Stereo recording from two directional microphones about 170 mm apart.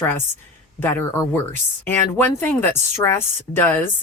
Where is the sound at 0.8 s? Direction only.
10° left (ahead or behind).